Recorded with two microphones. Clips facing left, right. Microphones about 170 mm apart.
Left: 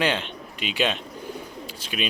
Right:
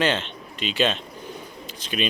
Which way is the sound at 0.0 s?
10° left (ahead or behind).